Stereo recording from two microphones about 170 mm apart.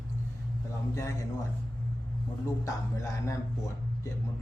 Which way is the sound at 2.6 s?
15° left (ahead or behind).